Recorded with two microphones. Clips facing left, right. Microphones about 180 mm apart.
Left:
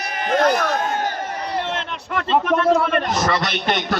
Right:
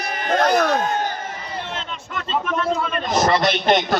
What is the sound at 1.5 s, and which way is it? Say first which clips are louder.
A man's voice: left 6 dB; 70° left (ahead or behind).